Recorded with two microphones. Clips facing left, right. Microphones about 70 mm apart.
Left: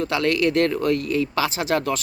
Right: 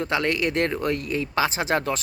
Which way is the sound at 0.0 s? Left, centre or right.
Right.